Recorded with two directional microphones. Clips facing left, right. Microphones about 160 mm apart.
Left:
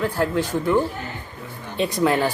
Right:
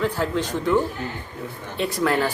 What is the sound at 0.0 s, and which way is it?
Speech, 10° left (ahead or behind).